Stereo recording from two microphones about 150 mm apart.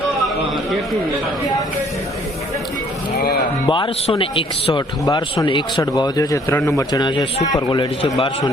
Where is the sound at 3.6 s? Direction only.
35° left (ahead or behind).